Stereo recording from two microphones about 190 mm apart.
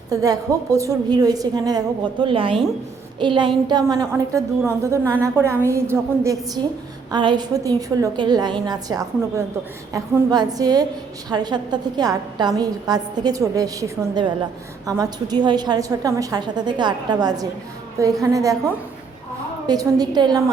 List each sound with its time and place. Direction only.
0.1 s a woman's voice: 20° right (ahead or behind)
19.6 s a woman's voice: 20° right (ahead or behind)